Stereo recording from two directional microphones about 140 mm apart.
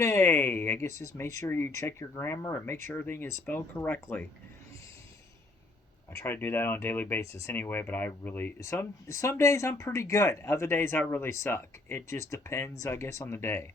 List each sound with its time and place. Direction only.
0.0 s speech: 20° left (ahead or behind)
6.1 s speech: 20° left (ahead or behind)